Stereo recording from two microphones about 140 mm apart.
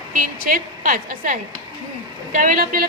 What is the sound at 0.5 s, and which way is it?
Speech, 85° right.